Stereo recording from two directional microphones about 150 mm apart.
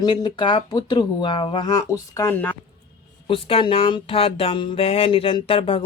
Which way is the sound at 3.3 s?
35° left (ahead or behind).